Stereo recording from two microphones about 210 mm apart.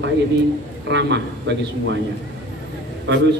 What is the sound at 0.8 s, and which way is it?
Speech, 55° right (ahead or behind).